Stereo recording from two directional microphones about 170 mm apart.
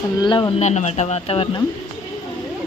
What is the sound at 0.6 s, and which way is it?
Speech, 40° left (ahead or behind).